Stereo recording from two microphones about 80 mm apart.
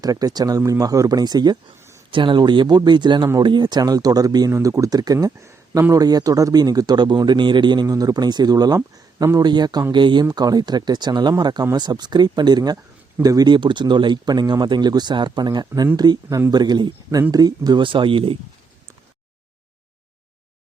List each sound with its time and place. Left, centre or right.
0.0 s speech: right
2.0 s speech: right
5.4 s a sound: right
5.9 s speech: right
9.9 s speech: right
10.3 s speech: right
13.2 s speech: right
13.5 s speech: right
17.3 s speech: right